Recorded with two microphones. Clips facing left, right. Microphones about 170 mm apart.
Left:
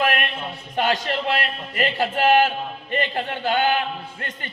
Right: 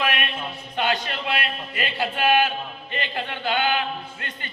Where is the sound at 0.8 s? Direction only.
40° left (ahead or behind).